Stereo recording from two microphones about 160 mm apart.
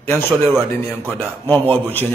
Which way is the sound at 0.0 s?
15° left (ahead or behind).